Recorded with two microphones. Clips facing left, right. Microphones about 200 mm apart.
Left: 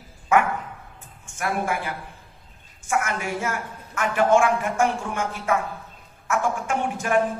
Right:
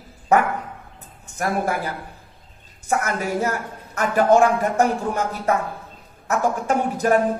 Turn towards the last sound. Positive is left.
turn(degrees=-40)  # may be behind; listen again after turning